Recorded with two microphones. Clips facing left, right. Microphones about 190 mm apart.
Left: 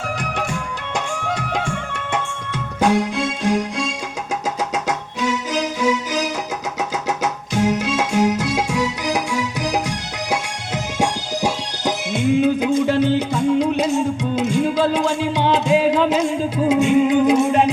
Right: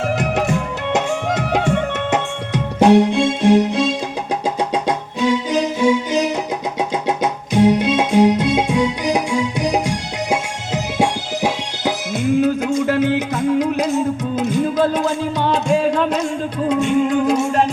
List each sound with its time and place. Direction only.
0.5 s music: 20° right (ahead or behind)
10.9 s music: 10° right (ahead or behind)